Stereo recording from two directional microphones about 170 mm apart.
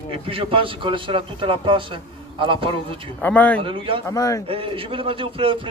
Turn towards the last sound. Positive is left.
turn(degrees=-30)  # may be behind; listen again after turning